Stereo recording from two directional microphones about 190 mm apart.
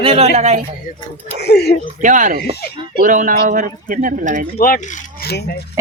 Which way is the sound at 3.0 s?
45° right (ahead or behind).